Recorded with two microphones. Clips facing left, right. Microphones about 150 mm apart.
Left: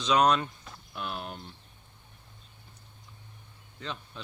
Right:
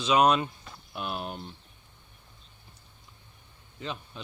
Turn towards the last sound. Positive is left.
turn(degrees=-10)  # may be behind; listen again after turning